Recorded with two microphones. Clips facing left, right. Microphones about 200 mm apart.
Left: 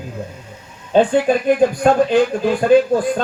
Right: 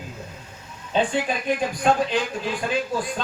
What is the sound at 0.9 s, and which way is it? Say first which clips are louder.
Speech: left 9 dB; 45° left (ahead or behind).